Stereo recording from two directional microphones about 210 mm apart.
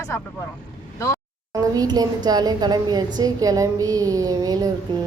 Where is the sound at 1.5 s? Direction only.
20° right (ahead or behind).